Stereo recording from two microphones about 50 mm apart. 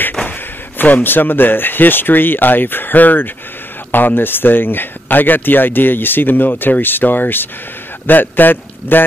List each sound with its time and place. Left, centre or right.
0.7 s speech: left